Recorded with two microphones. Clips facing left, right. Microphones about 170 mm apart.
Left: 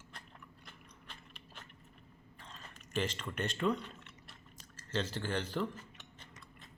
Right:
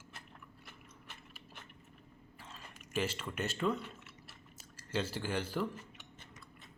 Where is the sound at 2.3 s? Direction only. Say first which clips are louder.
Even; 5° right (ahead or behind).